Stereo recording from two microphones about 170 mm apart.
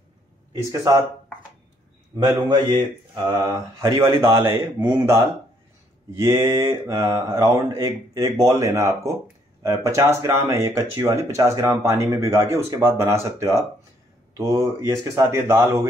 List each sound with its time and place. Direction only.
2.1 s speech: 25° right (ahead or behind)
6.1 s speech: 15° right (ahead or behind)